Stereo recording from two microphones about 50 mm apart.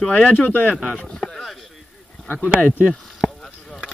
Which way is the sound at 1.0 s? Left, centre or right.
Centre.